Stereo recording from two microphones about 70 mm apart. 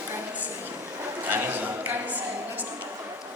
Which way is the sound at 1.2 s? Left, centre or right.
Right.